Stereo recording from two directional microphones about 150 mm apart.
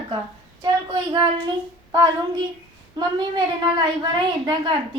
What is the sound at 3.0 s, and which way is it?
A woman's voice, 30° right (ahead or behind).